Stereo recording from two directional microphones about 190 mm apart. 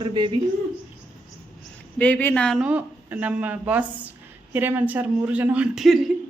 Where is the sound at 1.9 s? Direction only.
5° left (ahead or behind).